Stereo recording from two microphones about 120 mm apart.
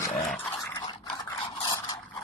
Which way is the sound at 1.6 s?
40° left (ahead or behind).